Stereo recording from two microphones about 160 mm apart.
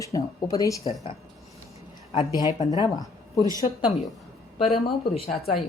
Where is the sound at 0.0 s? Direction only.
20° left (ahead or behind).